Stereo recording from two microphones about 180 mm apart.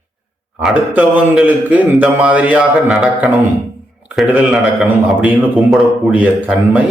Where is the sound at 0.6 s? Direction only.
5° right (ahead or behind).